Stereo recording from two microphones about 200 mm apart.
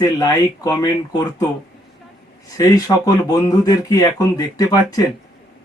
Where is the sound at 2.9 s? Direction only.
15° left (ahead or behind).